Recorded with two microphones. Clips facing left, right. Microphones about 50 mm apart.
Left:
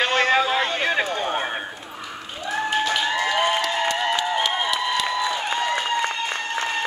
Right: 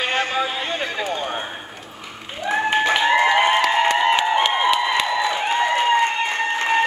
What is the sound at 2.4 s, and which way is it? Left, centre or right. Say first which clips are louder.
Applause: right 4 dB; right.